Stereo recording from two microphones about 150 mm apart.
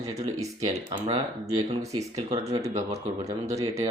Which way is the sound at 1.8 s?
20° right (ahead or behind).